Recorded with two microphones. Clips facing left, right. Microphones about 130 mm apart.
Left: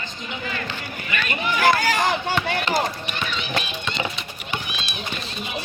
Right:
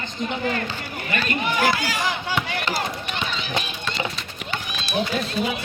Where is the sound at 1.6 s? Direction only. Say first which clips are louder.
Left 6 dB; 50° left (ahead or behind).